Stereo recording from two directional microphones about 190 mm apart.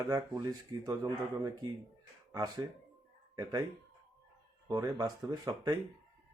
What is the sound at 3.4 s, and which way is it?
Speech, 20° right (ahead or behind).